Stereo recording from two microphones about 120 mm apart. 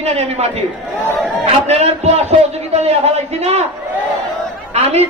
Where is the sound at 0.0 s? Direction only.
60° right (ahead or behind).